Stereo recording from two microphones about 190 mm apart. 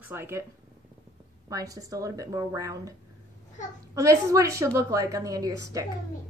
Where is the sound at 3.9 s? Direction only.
15° right (ahead or behind).